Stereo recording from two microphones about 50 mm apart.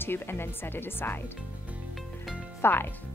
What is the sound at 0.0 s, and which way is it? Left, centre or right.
Speech, left.